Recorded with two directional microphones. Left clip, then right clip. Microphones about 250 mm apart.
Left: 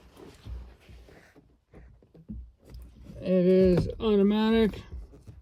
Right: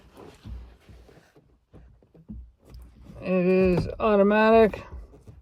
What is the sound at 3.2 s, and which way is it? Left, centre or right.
Speech, centre.